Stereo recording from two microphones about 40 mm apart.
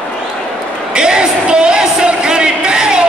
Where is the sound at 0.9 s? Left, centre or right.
Right.